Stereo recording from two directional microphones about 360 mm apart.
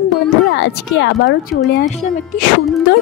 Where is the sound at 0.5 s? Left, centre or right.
Left.